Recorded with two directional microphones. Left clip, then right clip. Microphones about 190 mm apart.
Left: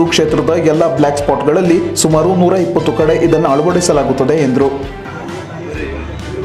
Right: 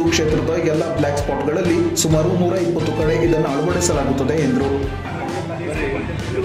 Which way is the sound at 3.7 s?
30° left (ahead or behind).